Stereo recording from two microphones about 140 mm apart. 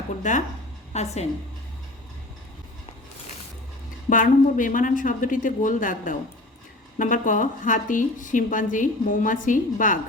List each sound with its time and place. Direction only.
0.2 s a woman's voice: 60° left (ahead or behind)
4.1 s a woman's voice: 70° left (ahead or behind)